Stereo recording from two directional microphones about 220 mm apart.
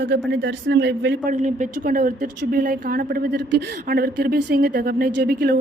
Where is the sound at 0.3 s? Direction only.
50° right (ahead or behind).